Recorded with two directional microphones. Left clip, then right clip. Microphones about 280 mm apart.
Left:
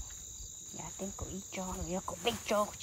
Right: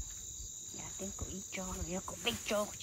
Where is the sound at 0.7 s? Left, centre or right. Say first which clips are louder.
Left 3 dB; centre.